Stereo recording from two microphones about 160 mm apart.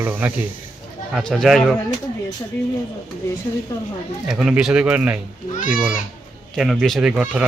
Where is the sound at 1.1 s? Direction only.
Centre (ahead or behind).